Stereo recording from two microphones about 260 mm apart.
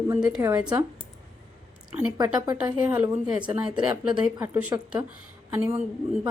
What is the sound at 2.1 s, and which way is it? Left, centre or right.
A woman's voice, centre.